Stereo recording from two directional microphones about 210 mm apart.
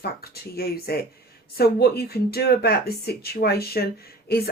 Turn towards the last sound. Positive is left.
turn(degrees=50)  # may be behind; listen again after turning